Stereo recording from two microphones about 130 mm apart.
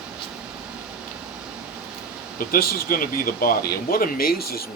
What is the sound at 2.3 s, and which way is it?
Speech, 90° left.